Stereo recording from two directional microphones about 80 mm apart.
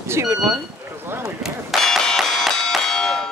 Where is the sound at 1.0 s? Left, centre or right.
Right.